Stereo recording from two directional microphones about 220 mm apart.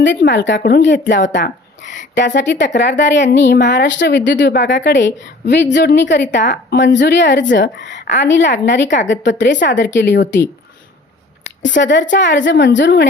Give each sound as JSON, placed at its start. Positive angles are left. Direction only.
{"t": 0.0, "sound": "speech", "side_deg": 55}
{"t": 6.4, "sound": "a woman's voice", "side_deg": 35}
{"t": 6.7, "sound": "a woman's voice", "side_deg": 55}
{"t": 11.7, "sound": "a woman's voice", "side_deg": 55}